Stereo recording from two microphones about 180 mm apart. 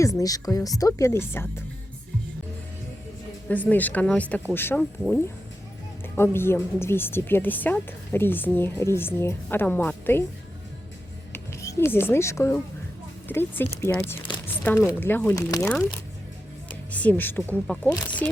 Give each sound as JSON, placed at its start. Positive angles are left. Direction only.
{"t": 0.0, "sound": "a woman's voice", "side_deg": 20}
{"t": 3.5, "sound": "a woman's voice", "side_deg": 10}
{"t": 11.3, "sound": "a sound", "side_deg": 15}
{"t": 13.2, "sound": "a woman's voice", "side_deg": 10}
{"t": 15.6, "sound": "speech", "side_deg": 5}
{"t": 16.9, "sound": "a woman's voice", "side_deg": 10}
{"t": 17.8, "sound": "speech", "side_deg": 20}